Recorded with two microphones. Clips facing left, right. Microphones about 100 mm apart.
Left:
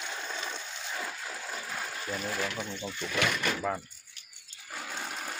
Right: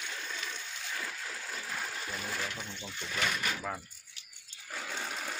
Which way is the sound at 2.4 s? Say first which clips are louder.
Left 5 dB; 90° left.